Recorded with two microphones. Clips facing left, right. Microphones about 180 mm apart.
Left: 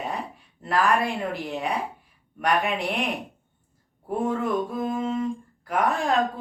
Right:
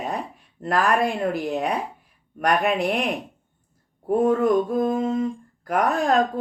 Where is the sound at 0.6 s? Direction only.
45° right (ahead or behind).